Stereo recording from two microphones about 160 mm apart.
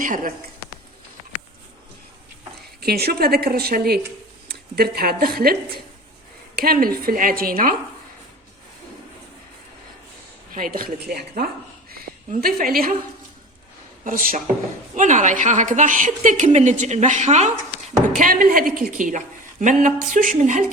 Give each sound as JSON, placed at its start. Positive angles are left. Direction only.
{"t": 0.0, "sound": "a woman's voice", "side_deg": -55}
{"t": 2.8, "sound": "a woman's voice", "side_deg": -80}
{"t": 10.5, "sound": "speech", "side_deg": -60}
{"t": 12.3, "sound": "a woman's voice", "side_deg": -65}
{"t": 14.0, "sound": "a woman's voice", "side_deg": -60}
{"t": 18.2, "sound": "a woman's voice", "side_deg": -60}